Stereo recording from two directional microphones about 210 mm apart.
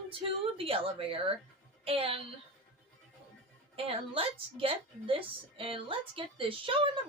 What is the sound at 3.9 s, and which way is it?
A woman's voice, 25° right (ahead or behind).